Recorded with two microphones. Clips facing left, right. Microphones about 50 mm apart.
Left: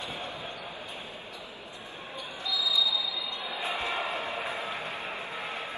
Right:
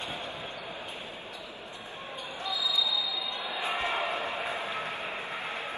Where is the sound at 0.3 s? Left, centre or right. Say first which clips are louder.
Even; right.